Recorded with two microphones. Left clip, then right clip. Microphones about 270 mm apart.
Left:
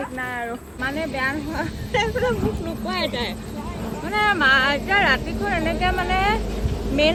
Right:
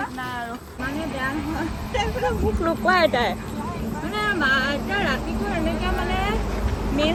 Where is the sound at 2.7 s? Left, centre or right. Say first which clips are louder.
Right 7 dB; centre.